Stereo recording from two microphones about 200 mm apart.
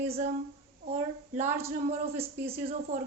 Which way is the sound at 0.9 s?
35° right (ahead or behind).